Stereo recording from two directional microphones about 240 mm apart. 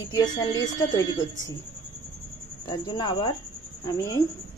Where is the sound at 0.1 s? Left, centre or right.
Centre.